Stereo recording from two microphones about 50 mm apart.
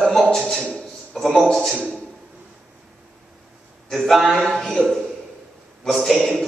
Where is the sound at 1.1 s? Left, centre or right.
Centre.